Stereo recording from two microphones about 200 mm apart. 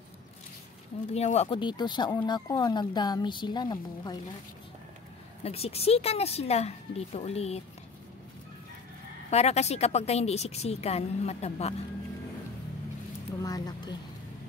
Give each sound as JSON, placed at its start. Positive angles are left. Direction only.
{"t": 1.1, "sound": "speech", "side_deg": 35}
{"t": 5.4, "sound": "a woman's voice", "side_deg": 30}
{"t": 9.3, "sound": "a woman's voice", "side_deg": 35}
{"t": 13.4, "sound": "speech", "side_deg": 20}